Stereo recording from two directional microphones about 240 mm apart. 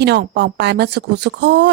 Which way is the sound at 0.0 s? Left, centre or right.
Right.